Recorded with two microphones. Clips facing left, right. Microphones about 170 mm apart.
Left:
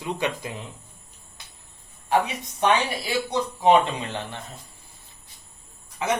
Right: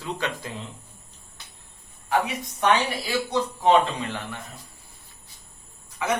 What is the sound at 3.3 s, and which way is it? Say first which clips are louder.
Speech: left 1 dB; 20° left (ahead or behind).